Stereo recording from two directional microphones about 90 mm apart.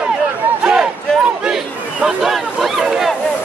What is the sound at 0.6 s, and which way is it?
Battle cry, 10° right (ahead or behind).